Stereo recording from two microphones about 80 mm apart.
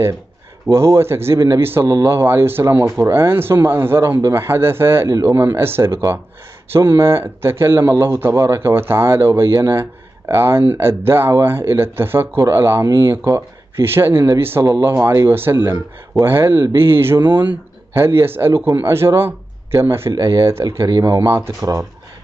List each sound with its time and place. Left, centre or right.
0.7 s a man's voice: right